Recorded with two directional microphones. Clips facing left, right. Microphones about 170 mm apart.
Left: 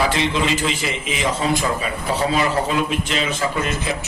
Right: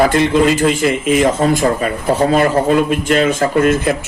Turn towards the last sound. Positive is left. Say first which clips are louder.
# right 10 dB
turn(degrees=-50)  # may be behind; listen again after turning